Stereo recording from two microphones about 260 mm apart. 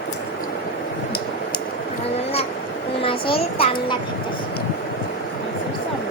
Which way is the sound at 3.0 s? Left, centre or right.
Centre.